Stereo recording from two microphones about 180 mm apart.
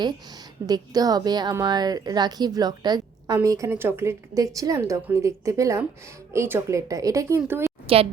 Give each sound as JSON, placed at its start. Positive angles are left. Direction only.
{"t": 0.7, "sound": "a woman's voice", "side_deg": -20}
{"t": 7.9, "sound": "a woman's voice", "side_deg": -30}